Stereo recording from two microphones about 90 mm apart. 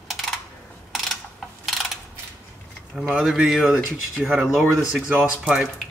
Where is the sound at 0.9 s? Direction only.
Centre (ahead or behind).